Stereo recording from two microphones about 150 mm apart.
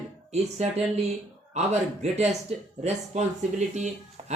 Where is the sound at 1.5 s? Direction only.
50° right (ahead or behind).